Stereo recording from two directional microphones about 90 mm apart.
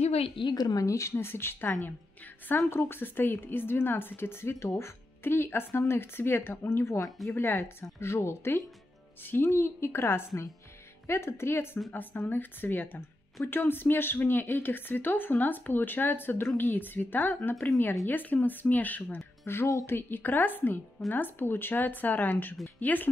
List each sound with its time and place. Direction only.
0.2 s a woman's voice: 60° left (ahead or behind); by 20.0 s 35° left (ahead or behind)
20.0 s speech: 20° left (ahead or behind)